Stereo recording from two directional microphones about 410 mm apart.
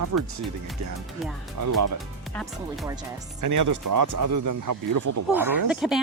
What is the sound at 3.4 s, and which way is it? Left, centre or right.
Speech, right.